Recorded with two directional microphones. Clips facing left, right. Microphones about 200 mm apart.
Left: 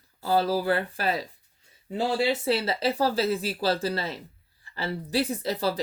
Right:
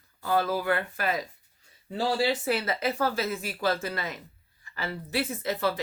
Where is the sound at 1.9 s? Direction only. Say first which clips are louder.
Left 1 dB; 20° left (ahead or behind).